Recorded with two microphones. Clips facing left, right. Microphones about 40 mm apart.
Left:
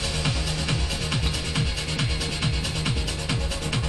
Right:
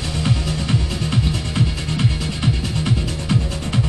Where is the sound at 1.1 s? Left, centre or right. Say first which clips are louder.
Right 7 dB; right.